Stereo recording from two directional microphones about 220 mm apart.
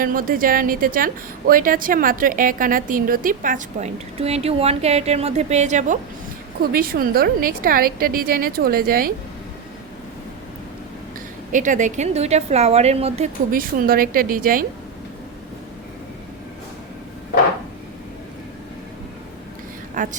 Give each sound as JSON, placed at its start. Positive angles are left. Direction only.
{"t": 0.0, "sound": "a woman's voice", "side_deg": -40}
{"t": 6.6, "sound": "a woman's voice", "side_deg": -45}
{"t": 11.5, "sound": "a woman's voice", "side_deg": -35}
{"t": 20.0, "sound": "a woman's voice", "side_deg": -35}